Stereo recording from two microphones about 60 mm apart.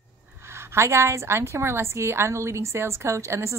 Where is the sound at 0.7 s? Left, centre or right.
Right.